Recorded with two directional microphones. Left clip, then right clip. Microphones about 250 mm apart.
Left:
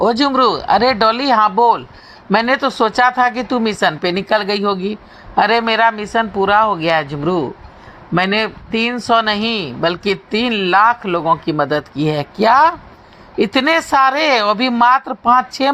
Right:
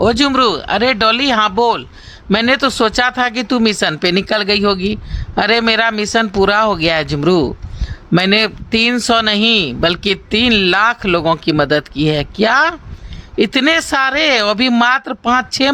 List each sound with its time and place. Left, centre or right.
0.0 s speech: right